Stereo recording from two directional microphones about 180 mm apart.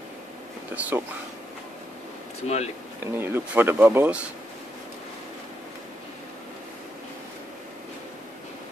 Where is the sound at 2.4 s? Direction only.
35° left (ahead or behind).